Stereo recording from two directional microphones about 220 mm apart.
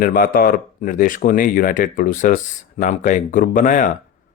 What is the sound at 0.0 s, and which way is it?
Speech, 40° left (ahead or behind).